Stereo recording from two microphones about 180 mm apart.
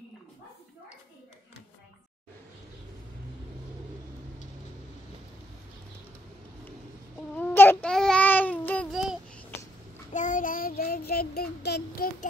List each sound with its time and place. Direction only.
7.3 s baby cry: 10° left (ahead or behind)
8.9 s babbling: 5° right (ahead or behind)
10.1 s child singing: 45° left (ahead or behind)